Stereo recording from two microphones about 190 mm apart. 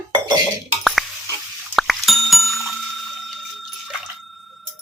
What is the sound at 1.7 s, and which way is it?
Bicycle bell, centre (ahead or behind).